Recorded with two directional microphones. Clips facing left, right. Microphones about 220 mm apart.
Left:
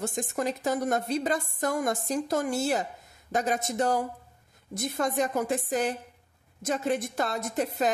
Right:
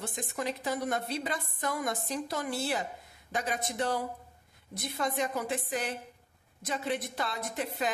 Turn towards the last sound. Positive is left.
turn(degrees=45)  # may be behind; listen again after turning